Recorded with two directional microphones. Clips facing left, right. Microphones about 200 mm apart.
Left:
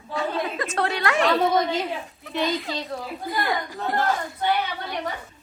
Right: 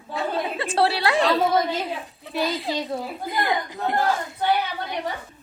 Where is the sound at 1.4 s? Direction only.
5° right (ahead or behind).